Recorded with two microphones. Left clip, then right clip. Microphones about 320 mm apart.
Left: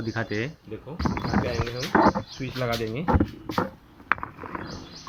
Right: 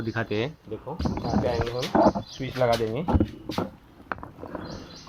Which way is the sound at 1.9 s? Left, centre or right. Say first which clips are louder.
Left 1 dB; left.